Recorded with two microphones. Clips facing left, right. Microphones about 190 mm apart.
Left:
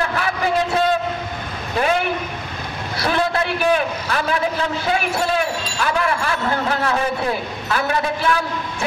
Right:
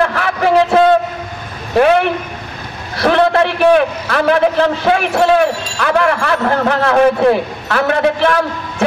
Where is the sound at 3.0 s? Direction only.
80° right.